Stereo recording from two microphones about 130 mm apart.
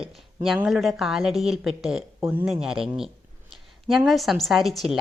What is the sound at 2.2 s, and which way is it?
Speech, 15° right (ahead or behind).